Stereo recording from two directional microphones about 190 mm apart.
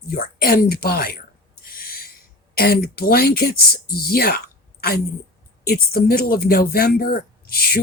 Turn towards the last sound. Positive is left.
turn(degrees=50)  # may be behind; listen again after turning